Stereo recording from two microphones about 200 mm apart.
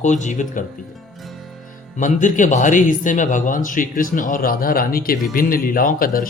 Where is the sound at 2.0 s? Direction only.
40° left (ahead or behind).